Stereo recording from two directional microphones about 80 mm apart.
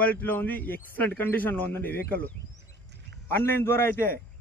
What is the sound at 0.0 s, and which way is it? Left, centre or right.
Speech, left.